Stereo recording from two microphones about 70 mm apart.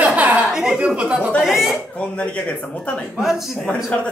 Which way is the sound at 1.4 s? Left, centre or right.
Centre.